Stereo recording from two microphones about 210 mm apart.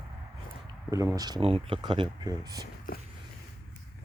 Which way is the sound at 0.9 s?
15° right (ahead or behind).